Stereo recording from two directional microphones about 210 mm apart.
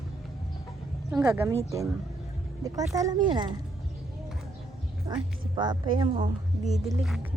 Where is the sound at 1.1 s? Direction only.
5° right (ahead or behind).